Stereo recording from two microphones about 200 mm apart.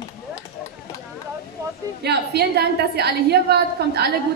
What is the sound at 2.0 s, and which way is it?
A woman's voice, 55° right (ahead or behind).